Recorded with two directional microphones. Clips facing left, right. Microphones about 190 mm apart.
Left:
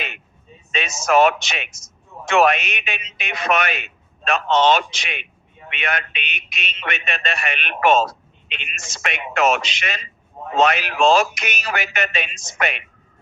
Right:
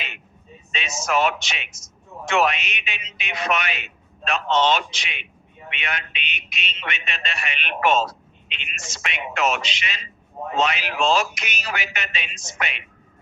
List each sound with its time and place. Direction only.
0.7 s a man's voice: 50° left (ahead or behind)